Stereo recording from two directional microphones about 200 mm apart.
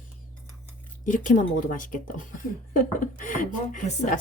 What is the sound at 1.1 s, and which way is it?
Speech, 40° left (ahead or behind).